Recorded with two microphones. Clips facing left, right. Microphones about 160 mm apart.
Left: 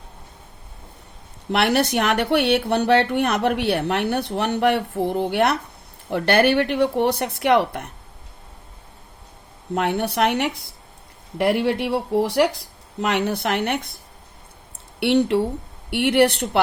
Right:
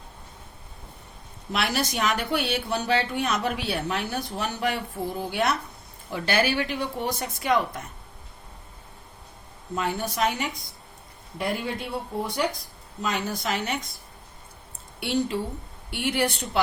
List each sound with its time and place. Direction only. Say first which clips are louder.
1.5 s speech: left 8 dB; 65° left (ahead or behind)
9.7 s speech: left 6 dB; 65° left (ahead or behind)
15.0 s speech: left 8 dB; 65° left (ahead or behind)